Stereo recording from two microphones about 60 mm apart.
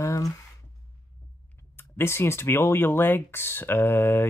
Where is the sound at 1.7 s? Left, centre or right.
Left.